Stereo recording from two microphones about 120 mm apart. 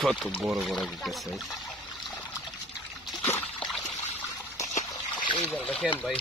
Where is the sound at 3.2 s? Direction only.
15° left (ahead or behind).